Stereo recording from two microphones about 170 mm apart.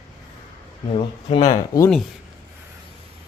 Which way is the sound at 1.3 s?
25° left (ahead or behind).